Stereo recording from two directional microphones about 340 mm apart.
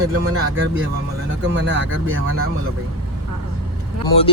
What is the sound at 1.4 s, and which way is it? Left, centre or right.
Speech, right.